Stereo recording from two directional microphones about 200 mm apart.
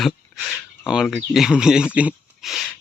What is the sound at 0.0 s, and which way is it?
Speech, centre (ahead or behind).